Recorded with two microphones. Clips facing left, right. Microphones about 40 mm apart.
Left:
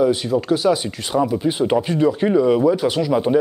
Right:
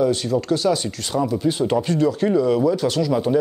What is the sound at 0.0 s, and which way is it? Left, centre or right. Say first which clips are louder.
Speech: left 2 dB; centre.